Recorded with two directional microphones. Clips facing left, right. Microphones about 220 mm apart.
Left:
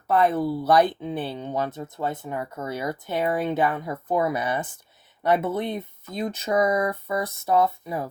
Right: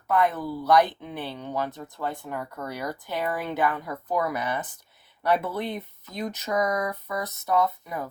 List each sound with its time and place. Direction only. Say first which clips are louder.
0.1 s speech: left 3 dB; 30° left (ahead or behind)